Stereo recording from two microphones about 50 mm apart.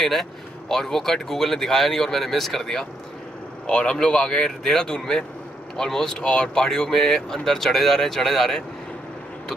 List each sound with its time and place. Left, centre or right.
0.0 s speech: centre
3.6 s speech: centre
6.2 s speech: left